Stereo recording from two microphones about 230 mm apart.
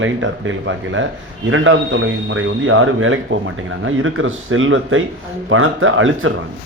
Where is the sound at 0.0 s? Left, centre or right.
Right.